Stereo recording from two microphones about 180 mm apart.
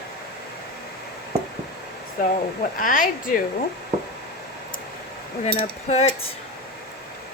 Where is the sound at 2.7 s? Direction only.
50° left (ahead or behind).